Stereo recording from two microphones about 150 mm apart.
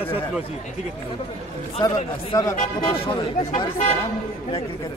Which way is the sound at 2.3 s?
25° left (ahead or behind).